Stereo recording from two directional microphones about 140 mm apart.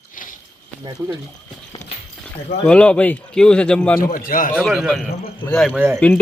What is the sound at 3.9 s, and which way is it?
Speech, 85° left.